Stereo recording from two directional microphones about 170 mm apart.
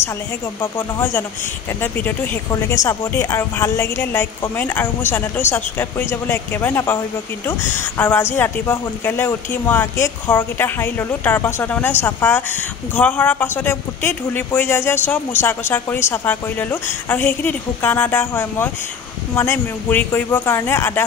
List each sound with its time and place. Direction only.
0.6 s a woman's voice: 15° left (ahead or behind)